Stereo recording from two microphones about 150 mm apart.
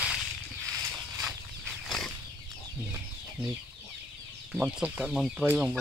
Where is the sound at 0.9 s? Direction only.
15° right (ahead or behind).